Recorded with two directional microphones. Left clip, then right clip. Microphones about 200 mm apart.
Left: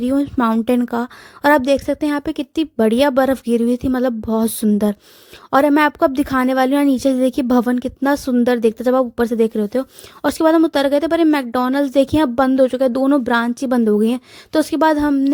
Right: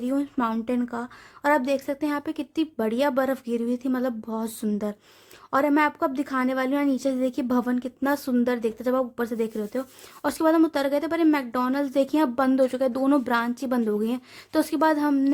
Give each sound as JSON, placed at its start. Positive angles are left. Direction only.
{"t": 0.0, "sound": "a woman's voice", "side_deg": 35}